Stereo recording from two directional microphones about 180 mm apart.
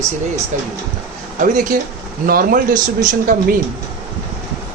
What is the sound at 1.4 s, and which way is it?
Speech, 45° right (ahead or behind).